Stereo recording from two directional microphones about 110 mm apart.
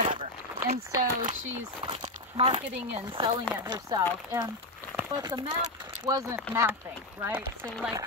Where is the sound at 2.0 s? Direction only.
60° right (ahead or behind).